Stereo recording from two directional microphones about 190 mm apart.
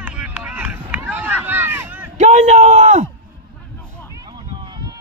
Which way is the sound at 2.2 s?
40° right (ahead or behind).